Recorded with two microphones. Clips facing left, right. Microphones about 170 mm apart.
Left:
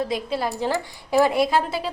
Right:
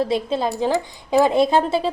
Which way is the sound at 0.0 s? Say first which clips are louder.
Right 4 dB; 25° right (ahead or behind).